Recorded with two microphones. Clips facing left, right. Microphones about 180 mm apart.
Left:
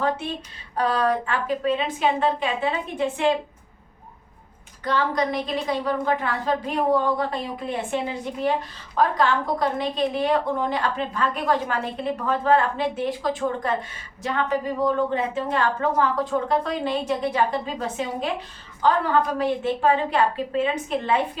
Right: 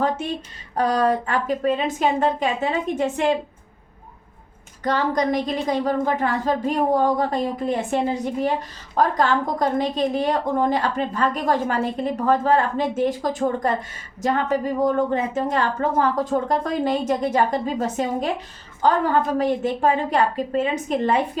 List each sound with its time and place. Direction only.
0.8 s a woman's voice: 45° right (ahead or behind)
4.8 s a woman's voice: 45° right (ahead or behind)